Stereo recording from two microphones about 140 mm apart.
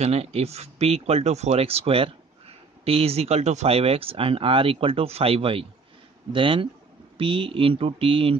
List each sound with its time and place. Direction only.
0.0 s speech: 50° right (ahead or behind)